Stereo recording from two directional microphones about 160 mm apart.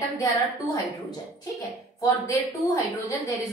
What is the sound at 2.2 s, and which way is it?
A woman's voice, 20° left (ahead or behind).